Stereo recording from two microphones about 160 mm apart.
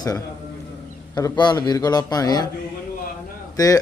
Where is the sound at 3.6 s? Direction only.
20° left (ahead or behind).